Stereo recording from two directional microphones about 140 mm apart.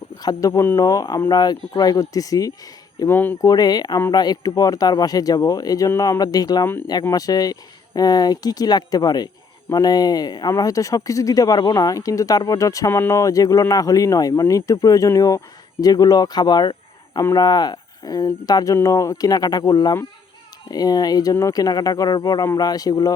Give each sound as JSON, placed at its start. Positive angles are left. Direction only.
{"t": 0.2, "sound": "speech", "side_deg": 25}
{"t": 3.0, "sound": "speech", "side_deg": 15}
{"t": 3.5, "sound": "speech", "side_deg": 30}